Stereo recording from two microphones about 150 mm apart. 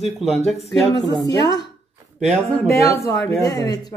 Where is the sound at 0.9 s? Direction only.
25° left (ahead or behind).